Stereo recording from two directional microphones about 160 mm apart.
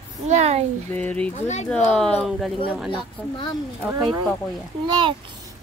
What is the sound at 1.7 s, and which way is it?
Speech, 5° left (ahead or behind).